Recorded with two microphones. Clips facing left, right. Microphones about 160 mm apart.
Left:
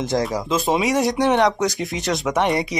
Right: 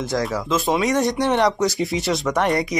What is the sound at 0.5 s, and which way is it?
Speech, 20° left (ahead or behind).